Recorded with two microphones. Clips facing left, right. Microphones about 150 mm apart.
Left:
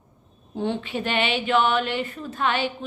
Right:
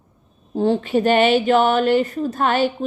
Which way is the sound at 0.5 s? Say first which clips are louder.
Right 9 dB; 40° right (ahead or behind).